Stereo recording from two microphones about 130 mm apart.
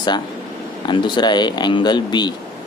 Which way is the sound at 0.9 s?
35° left (ahead or behind).